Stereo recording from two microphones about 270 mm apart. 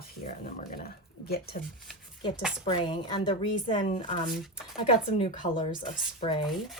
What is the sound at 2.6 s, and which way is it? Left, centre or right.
Speech, centre.